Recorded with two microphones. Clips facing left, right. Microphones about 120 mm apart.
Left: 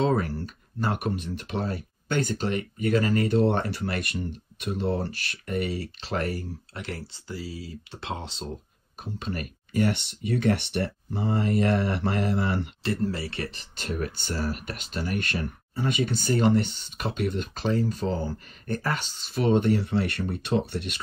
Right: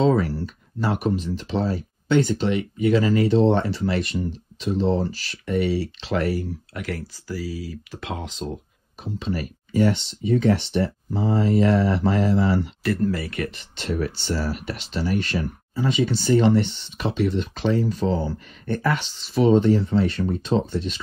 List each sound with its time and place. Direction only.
0.0 s speech: 50° left (ahead or behind)
6.7 s speech: 25° left (ahead or behind)
9.0 s speech: 50° left (ahead or behind)
12.8 s speech: 25° left (ahead or behind); by 21.0 s 60° left (ahead or behind)